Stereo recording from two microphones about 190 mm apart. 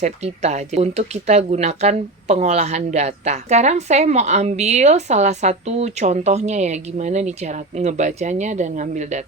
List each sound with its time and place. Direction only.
0.0 s speech: 35° right (ahead or behind)